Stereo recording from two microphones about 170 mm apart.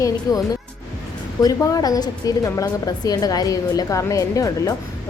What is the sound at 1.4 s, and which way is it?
A woman's voice, 20° left (ahead or behind).